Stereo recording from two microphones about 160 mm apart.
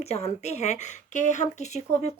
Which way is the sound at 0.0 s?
40° left (ahead or behind).